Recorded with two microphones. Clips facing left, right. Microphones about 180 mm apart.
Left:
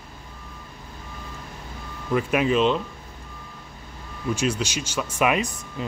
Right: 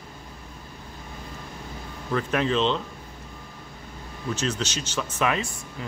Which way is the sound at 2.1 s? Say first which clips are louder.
Left 3 dB; 10° left (ahead or behind).